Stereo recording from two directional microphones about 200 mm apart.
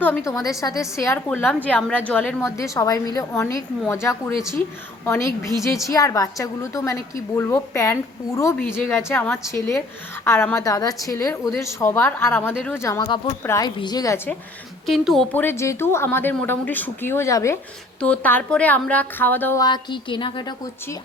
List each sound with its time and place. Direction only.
0.3 s a woman's voice: 15° left (ahead or behind)
14.8 s a woman's voice: centre (ahead or behind); by 20.4 s 25° left (ahead or behind)